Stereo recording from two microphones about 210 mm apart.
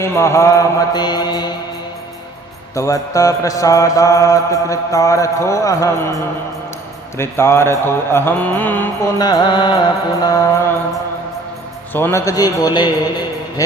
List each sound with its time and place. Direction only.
0.0 s mantra: 15° left (ahead or behind)
2.7 s mantra: 15° left (ahead or behind)
9.2 s mantra: 20° left (ahead or behind)
11.9 s mantra: 10° left (ahead or behind)